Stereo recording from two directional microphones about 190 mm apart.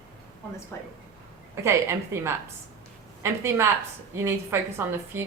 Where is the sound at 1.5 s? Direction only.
15° right (ahead or behind).